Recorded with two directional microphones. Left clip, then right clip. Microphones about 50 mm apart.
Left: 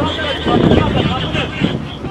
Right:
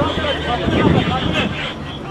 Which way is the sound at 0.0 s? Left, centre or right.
Left.